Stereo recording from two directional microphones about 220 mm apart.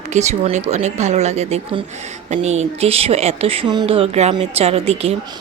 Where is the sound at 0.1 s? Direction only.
30° right (ahead or behind).